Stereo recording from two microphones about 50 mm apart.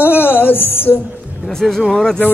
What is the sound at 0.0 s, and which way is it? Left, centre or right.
Music, left.